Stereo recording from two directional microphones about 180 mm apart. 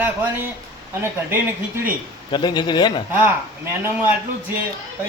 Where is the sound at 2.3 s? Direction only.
25° left (ahead or behind).